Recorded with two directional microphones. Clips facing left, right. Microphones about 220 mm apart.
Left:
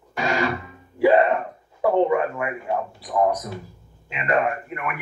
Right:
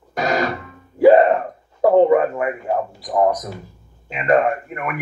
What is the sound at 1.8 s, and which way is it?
Speech, 40° right (ahead or behind).